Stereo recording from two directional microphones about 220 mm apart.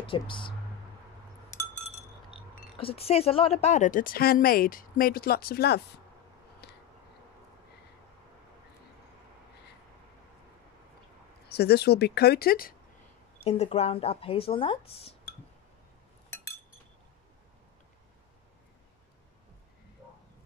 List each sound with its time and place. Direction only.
0.0 s speech: 25° left (ahead or behind)
2.8 s a woman's voice: 25° left (ahead or behind); by 5.9 s 50° left (ahead or behind)
6.6 s a sound: 50° left (ahead or behind)
11.4 s speech: 45° left (ahead or behind)
13.4 s a woman's voice: 30° left (ahead or behind)
16.3 s chink: 10° left (ahead or behind)